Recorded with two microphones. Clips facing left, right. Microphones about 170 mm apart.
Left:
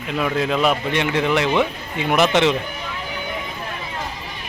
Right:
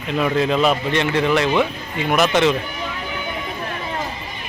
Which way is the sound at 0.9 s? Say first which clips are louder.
Right 1 dB; 15° left (ahead or behind).